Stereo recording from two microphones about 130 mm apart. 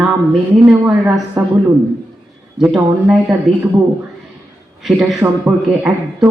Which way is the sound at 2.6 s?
10° right (ahead or behind).